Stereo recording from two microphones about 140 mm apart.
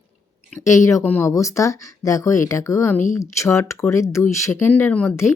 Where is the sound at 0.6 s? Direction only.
20° left (ahead or behind).